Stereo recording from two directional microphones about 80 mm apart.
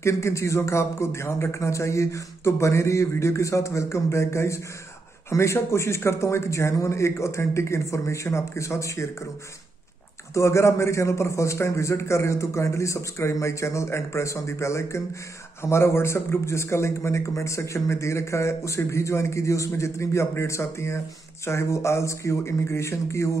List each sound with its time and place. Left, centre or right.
0.0 s a man's voice: left
10.3 s a man's voice: left